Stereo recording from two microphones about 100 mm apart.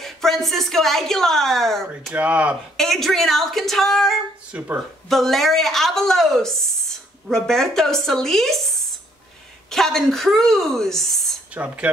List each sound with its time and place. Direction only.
0.0 s a woman's voice: centre (ahead or behind)
2.1 s speech: 15° right (ahead or behind)
2.8 s a woman's voice: centre (ahead or behind)
4.5 s speech: 10° right (ahead or behind)
5.1 s a woman's voice: centre (ahead or behind)
11.5 s speech: 15° right (ahead or behind)